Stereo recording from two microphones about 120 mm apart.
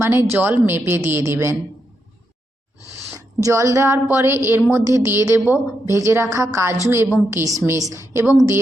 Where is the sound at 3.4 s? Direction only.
25° right (ahead or behind).